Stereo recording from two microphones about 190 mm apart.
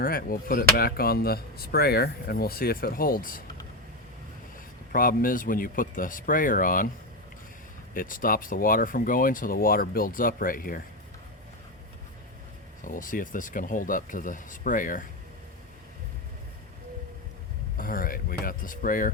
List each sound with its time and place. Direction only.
0.0 s speech: 50° left (ahead or behind)
4.9 s speech: 50° left (ahead or behind)
7.9 s speech: 45° left (ahead or behind)
12.8 s speech: 45° left (ahead or behind)
17.7 s speech: 50° left (ahead or behind)